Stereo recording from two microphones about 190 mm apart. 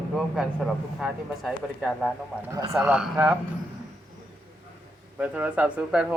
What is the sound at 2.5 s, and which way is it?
Speech, 15° right (ahead or behind).